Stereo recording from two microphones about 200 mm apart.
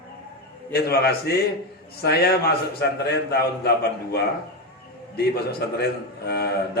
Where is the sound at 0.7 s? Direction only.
50° left (ahead or behind).